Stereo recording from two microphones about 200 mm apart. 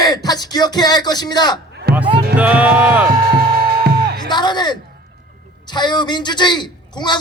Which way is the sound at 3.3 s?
50° right (ahead or behind).